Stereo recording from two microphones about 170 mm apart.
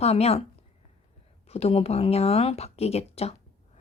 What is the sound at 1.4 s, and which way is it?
Speech, 35° left (ahead or behind).